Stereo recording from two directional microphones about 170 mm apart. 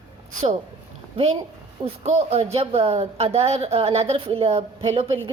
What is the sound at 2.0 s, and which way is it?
A woman's voice, 40° right (ahead or behind).